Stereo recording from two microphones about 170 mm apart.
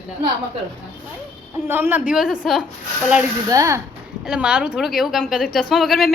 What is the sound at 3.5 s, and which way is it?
Speech, 20° right (ahead or behind).